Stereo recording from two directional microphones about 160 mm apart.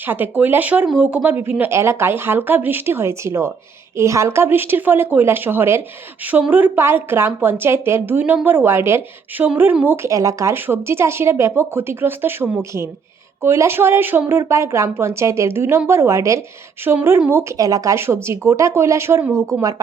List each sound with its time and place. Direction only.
0.0 s speech: 10° right (ahead or behind)